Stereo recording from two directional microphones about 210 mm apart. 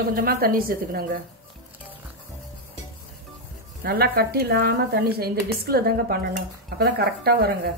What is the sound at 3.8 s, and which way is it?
A woman's voice, 45° right (ahead or behind).